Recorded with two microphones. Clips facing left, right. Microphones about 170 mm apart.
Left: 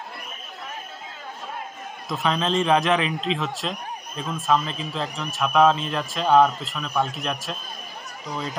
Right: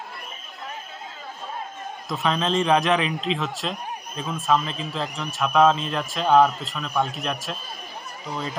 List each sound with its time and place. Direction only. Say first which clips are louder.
2.0 s speech: even; centre (ahead or behind)